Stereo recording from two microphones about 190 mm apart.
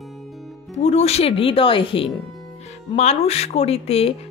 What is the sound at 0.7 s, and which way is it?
A woman's voice, 35° left (ahead or behind).